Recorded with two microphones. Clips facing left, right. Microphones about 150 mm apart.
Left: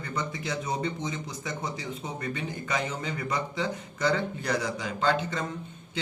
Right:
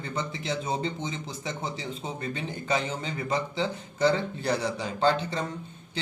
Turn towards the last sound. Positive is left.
turn(degrees=-30)  # may be behind; listen again after turning